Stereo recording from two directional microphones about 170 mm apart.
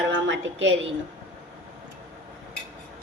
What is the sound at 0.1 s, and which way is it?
Speech, 90° right.